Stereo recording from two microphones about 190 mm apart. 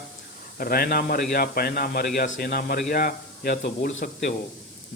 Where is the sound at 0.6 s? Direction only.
50° left (ahead or behind).